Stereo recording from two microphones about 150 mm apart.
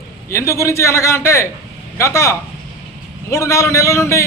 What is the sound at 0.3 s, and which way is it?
A man's voice, 20° left (ahead or behind).